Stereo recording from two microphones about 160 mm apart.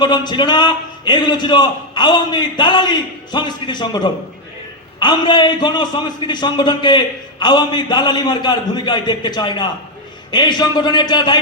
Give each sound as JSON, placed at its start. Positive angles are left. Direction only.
{"t": 0.0, "sound": "a man's voice", "side_deg": 30}